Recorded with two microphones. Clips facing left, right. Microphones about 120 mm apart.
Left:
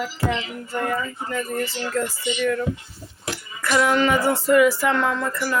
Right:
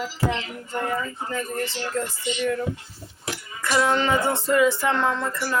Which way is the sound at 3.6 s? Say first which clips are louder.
Left 2 dB; 25° right (ahead or behind).